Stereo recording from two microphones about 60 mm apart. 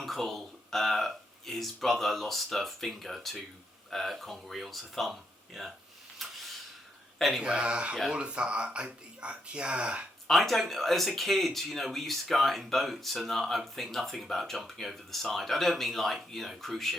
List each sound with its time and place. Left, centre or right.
0.0 s speech: centre
6.2 s a sound: centre
7.2 s speech: centre
7.4 s speech: centre
10.2 s speech: centre